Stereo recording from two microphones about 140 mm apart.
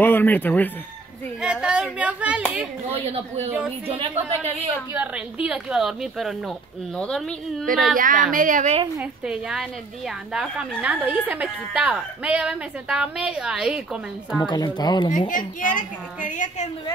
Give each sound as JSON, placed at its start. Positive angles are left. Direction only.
{"t": 0.0, "sound": "speech", "side_deg": 15}
{"t": 1.4, "sound": "speech", "side_deg": -5}
{"t": 2.9, "sound": "a woman's voice", "side_deg": -45}
{"t": 3.5, "sound": "a woman's voice", "side_deg": -10}
{"t": 4.9, "sound": "a woman's voice", "side_deg": -10}
{"t": 7.9, "sound": "a woman's voice", "side_deg": -75}
{"t": 9.2, "sound": "a woman's voice", "side_deg": -5}
{"t": 14.4, "sound": "speech", "side_deg": 30}
{"t": 15.1, "sound": "a woman's voice", "side_deg": 70}